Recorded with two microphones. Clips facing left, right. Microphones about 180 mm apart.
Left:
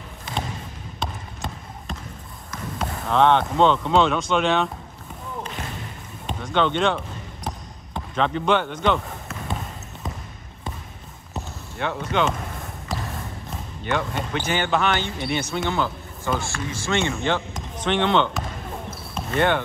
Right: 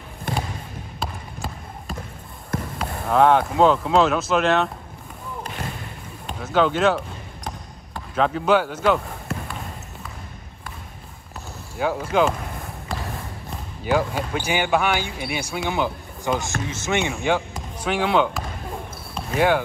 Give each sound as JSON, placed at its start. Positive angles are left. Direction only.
{"t": 0.9, "sound": "trickle", "side_deg": -5}
{"t": 2.8, "sound": "speech", "side_deg": -5}
{"t": 6.4, "sound": "speech", "side_deg": -5}
{"t": 7.4, "sound": "basketball bounce", "side_deg": -5}
{"t": 11.7, "sound": "speech", "side_deg": -5}
{"t": 12.9, "sound": "a sound", "side_deg": 5}
{"t": 13.5, "sound": "speech", "side_deg": -5}
{"t": 17.6, "sound": "basketball bounce", "side_deg": -5}